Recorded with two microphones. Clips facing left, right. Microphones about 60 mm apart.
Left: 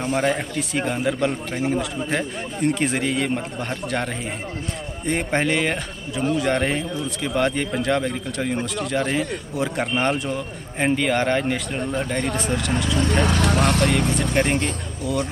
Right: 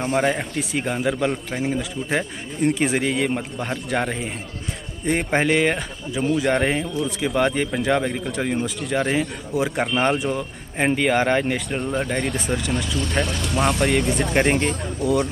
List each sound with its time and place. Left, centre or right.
0.0 s a man's voice: centre
13.2 s speech: left
13.8 s a man's voice: centre
14.6 s speech: right